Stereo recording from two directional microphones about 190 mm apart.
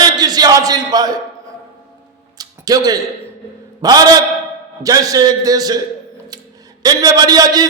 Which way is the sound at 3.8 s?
20° right (ahead or behind).